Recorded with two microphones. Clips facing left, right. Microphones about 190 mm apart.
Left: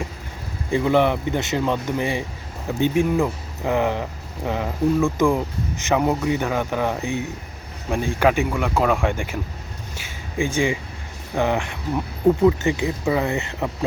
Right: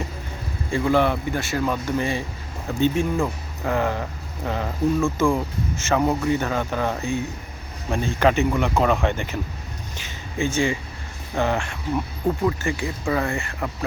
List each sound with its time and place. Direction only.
0.7 s a man's voice: 20° left (ahead or behind)